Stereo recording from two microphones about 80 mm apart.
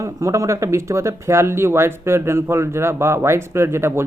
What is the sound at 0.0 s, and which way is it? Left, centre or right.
Speech, right.